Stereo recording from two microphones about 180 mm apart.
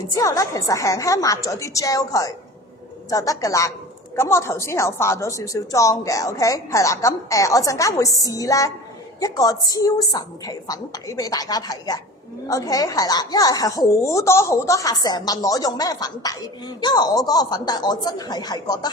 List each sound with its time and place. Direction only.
0.2 s a woman's voice: 20° left (ahead or behind)